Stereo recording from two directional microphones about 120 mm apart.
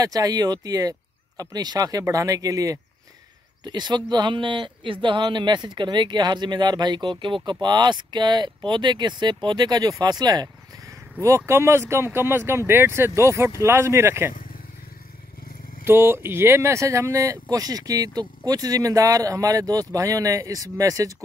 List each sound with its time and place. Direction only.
0.0 s speech: 30° right (ahead or behind)
15.8 s speech: 20° right (ahead or behind)